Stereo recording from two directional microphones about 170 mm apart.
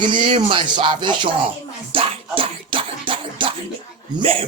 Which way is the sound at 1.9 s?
30° right (ahead or behind).